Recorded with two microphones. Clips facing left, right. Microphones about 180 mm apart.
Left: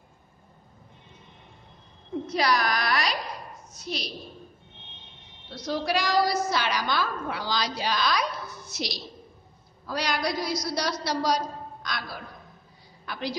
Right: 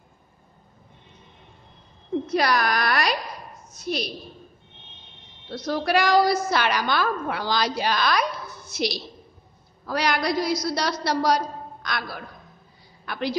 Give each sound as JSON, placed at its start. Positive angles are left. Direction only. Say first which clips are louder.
{"t": 2.3, "sound": "a woman's voice", "louder": "right 2 dB", "side_deg": -55}
{"t": 5.5, "sound": "a woman's voice", "louder": "right 4 dB", "side_deg": -60}
{"t": 13.0, "sound": "a woman's voice", "louder": "right 5 dB", "side_deg": -60}